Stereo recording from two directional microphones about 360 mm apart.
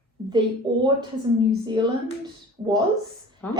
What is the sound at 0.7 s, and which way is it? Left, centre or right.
A woman's voice, centre.